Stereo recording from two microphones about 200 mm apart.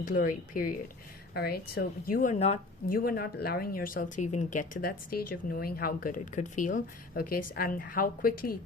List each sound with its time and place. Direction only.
0.0 s speech: 45° left (ahead or behind)